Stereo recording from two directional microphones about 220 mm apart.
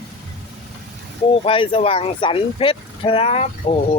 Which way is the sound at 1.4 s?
25° left (ahead or behind).